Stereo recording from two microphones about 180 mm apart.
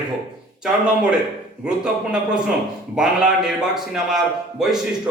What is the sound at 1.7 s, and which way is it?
A man's voice, 5° right (ahead or behind).